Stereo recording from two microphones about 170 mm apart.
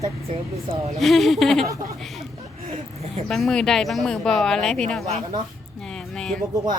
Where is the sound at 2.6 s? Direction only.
40° right (ahead or behind).